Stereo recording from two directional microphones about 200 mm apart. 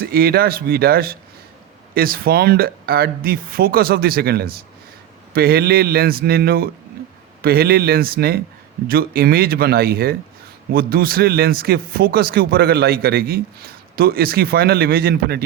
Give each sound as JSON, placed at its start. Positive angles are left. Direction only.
{"t": 0.0, "sound": "a man's voice", "side_deg": -50}